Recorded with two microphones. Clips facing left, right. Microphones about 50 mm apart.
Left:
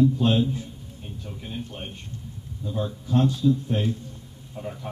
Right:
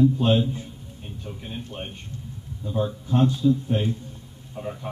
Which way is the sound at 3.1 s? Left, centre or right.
Right.